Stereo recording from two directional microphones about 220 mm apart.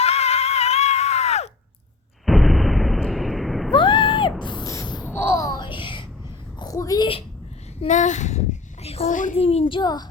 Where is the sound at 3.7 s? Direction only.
20° left (ahead or behind).